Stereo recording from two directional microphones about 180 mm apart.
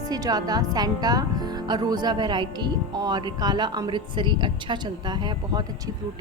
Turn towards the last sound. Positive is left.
turn(degrees=-20)  # may be behind; listen again after turning